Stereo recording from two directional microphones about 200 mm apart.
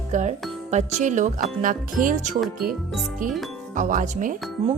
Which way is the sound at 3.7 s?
40° right (ahead or behind).